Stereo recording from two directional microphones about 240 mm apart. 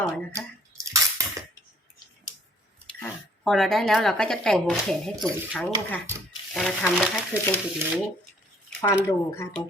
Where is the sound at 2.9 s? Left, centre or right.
Centre.